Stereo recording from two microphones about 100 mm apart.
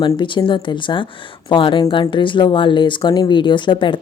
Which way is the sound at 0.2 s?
55° left (ahead or behind).